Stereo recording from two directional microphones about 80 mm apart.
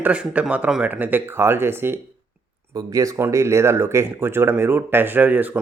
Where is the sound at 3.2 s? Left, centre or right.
Right.